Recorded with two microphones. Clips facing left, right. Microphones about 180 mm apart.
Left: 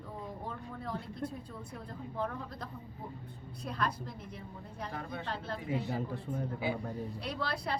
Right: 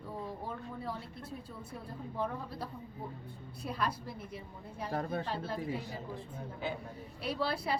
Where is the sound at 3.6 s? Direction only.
10° right (ahead or behind).